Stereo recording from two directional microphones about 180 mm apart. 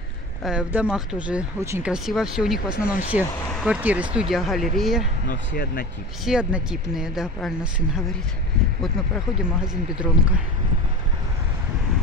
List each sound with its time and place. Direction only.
0.4 s speech: 5° right (ahead or behind)
2.7 s speech: 50° left (ahead or behind)
3.1 s speech: 5° right (ahead or behind)
5.3 s speech: 50° left (ahead or behind)
6.2 s speech: 5° right (ahead or behind)